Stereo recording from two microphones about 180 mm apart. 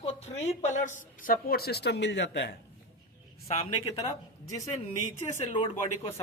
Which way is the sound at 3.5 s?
35° left (ahead or behind).